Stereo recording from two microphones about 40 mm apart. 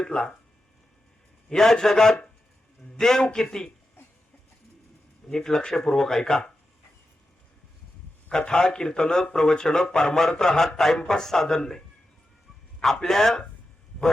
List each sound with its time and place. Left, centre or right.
0.0 s speech: centre
1.5 s speech: centre
5.3 s speech: centre
8.3 s speech: centre
12.8 s speech: centre